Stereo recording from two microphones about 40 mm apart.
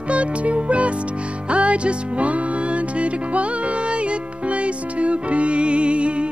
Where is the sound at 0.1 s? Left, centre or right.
Right.